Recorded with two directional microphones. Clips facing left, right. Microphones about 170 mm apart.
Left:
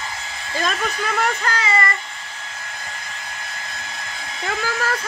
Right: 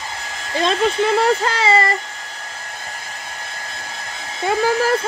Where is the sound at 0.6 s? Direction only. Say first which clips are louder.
Right 7 dB; 25° right (ahead or behind).